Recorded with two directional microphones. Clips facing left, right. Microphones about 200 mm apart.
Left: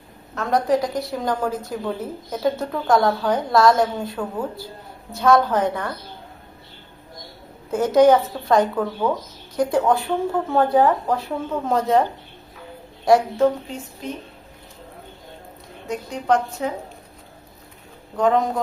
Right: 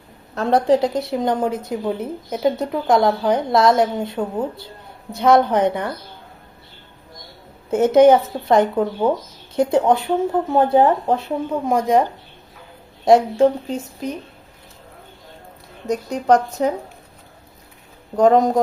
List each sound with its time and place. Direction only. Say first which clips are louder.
0.3 s a woman's voice: right 4 dB; 30° right (ahead or behind)
7.7 s a woman's voice: right 3 dB; 25° right (ahead or behind)
11.5 s speech: right 2 dB; 15° right (ahead or behind)
13.1 s a woman's voice: right 3 dB; 25° right (ahead or behind)
15.9 s a woman's voice: right 5 dB; 40° right (ahead or behind)
18.2 s a woman's voice: right 5 dB; 40° right (ahead or behind)